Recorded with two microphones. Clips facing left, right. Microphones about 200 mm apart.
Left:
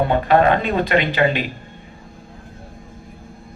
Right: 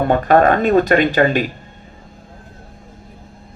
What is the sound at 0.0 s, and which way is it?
Speech, 45° right (ahead or behind).